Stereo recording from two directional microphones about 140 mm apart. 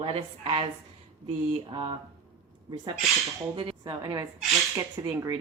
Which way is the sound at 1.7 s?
35° right (ahead or behind).